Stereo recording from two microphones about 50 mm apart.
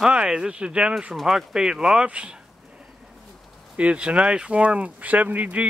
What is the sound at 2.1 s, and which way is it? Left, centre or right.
Speech, right.